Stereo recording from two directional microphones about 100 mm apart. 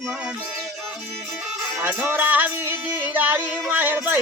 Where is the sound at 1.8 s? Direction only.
20° right (ahead or behind).